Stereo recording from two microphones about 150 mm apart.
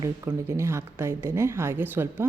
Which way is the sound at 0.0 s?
20° right (ahead or behind).